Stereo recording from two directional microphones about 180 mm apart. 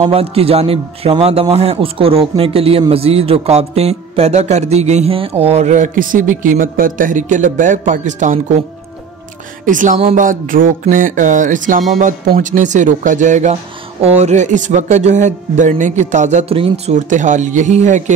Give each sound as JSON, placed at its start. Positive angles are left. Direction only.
{"t": 0.0, "sound": "a man's voice", "side_deg": -30}
{"t": 9.7, "sound": "a man's voice", "side_deg": -45}